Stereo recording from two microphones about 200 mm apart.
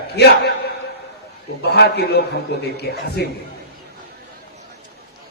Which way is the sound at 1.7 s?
55° left (ahead or behind).